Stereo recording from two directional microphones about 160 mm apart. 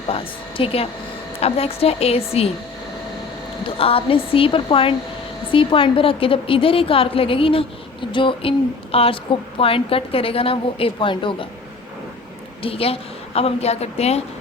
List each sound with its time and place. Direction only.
0.1 s a woman's voice: 35° left (ahead or behind)
3.8 s a woman's voice: 35° left (ahead or behind)
12.6 s a woman's voice: 35° left (ahead or behind)